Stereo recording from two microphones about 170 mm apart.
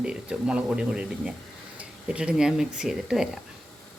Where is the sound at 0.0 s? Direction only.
5° right (ahead or behind).